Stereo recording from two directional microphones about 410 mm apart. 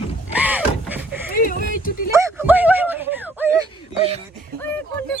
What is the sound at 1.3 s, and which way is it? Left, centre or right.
Speech, centre.